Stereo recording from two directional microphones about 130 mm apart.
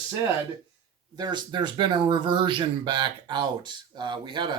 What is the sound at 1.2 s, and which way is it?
Speech, 35° right (ahead or behind).